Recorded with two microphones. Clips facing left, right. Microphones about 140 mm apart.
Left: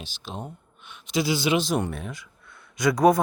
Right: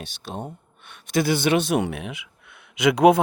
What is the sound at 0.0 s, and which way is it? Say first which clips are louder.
Speech: right 3 dB; 60° right (ahead or behind).